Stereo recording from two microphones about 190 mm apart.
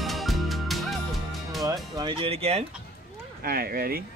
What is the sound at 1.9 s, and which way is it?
Speech, 25° right (ahead or behind).